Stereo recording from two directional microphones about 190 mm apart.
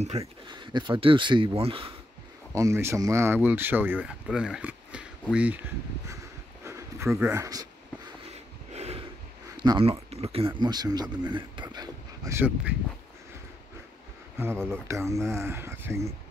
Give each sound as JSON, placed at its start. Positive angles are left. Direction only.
{"t": 0.2, "sound": "speech", "side_deg": -25}
{"t": 2.5, "sound": "speech", "side_deg": -15}
{"t": 6.6, "sound": "a sound", "side_deg": -15}
{"t": 7.2, "sound": "speech", "side_deg": -15}
{"t": 8.7, "sound": "a sound", "side_deg": -35}
{"t": 9.6, "sound": "speech", "side_deg": -25}
{"t": 14.7, "sound": "speech", "side_deg": -15}